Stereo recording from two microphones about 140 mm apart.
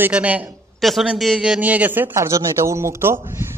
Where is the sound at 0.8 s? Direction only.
Centre (ahead or behind).